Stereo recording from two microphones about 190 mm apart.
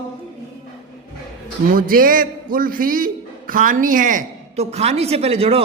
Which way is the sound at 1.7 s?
50° right (ahead or behind).